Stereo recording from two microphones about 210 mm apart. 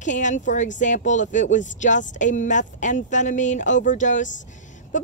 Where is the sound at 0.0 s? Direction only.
35° left (ahead or behind).